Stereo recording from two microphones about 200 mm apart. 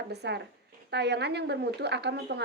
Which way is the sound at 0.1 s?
55° right (ahead or behind).